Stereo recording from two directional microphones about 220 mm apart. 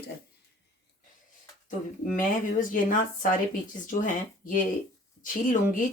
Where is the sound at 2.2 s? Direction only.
40° left (ahead or behind).